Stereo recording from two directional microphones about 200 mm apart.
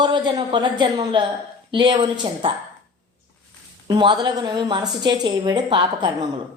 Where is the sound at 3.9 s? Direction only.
20° right (ahead or behind).